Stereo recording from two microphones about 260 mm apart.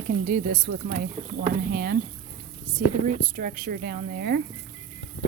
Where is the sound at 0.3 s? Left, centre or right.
Right.